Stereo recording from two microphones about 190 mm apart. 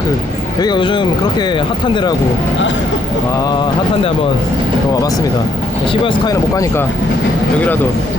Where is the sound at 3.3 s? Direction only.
20° left (ahead or behind).